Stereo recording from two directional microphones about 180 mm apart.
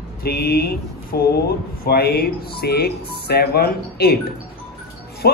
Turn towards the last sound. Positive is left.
turn(degrees=60)  # may be behind; listen again after turning